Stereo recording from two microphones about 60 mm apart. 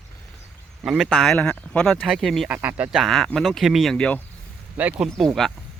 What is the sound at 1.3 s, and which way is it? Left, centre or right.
Speech, left.